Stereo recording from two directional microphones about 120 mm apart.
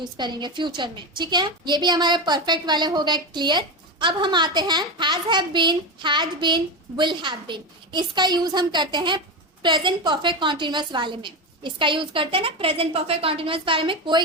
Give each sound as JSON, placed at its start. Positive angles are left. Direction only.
{"t": 0.2, "sound": "a woman's voice", "side_deg": -40}